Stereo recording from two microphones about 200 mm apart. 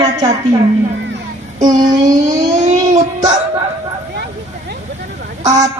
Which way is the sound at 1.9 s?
20° right (ahead or behind).